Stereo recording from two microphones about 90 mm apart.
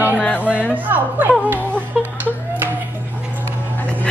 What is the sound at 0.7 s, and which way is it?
Speech, 20° right (ahead or behind).